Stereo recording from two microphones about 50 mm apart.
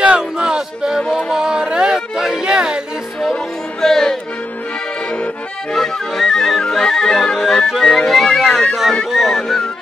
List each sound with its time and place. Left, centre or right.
0.0 s a sound: centre
3.8 s speech: centre
5.1 s accordion: centre
5.8 s music: centre
7.8 s speech: centre
9.1 s music: centre